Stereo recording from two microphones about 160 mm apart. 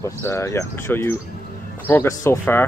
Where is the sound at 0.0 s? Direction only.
15° left (ahead or behind).